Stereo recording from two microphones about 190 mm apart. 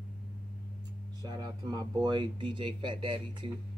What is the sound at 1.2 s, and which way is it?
Speech, 20° right (ahead or behind).